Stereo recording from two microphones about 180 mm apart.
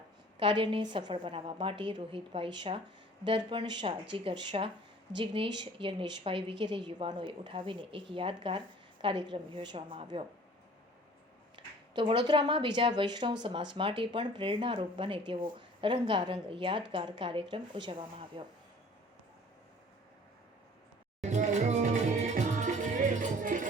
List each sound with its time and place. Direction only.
0.3 s a woman's voice: 30° right (ahead or behind)
11.5 s a woman's voice: 25° right (ahead or behind)
21.2 s music: 40° right (ahead or behind)